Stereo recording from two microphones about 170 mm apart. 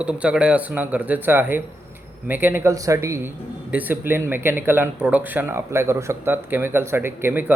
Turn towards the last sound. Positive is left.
turn(degrees=-10)  # may be behind; listen again after turning